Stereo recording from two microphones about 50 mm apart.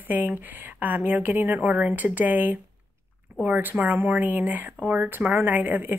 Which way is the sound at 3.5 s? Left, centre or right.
Right.